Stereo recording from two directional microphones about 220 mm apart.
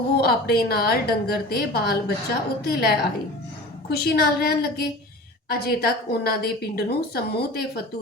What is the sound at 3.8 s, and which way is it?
A woman's voice, 45° left (ahead or behind).